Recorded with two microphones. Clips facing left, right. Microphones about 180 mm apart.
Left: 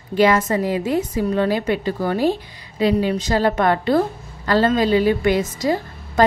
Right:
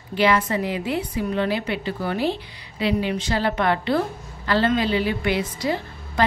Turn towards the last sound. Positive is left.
turn(degrees=45)  # may be behind; listen again after turning